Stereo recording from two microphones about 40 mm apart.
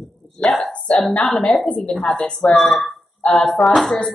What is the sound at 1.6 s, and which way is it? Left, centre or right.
Speech, left.